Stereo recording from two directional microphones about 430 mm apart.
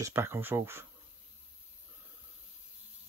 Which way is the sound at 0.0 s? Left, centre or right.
Centre.